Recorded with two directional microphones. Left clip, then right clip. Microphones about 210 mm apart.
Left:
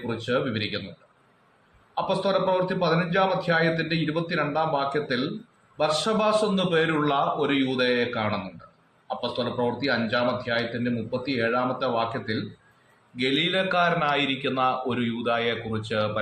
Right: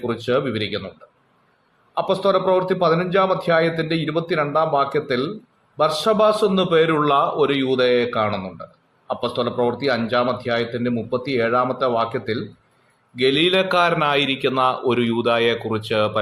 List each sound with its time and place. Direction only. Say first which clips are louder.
0.1 s a man's voice: right 4 dB; 50° right (ahead or behind)
2.0 s a man's voice: right 5 dB; 50° right (ahead or behind)